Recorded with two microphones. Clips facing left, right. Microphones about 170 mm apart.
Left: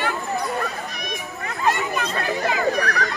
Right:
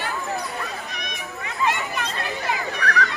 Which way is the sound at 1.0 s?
45° left (ahead or behind).